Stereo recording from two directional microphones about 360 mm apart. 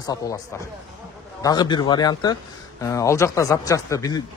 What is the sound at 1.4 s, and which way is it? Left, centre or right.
Speech, centre.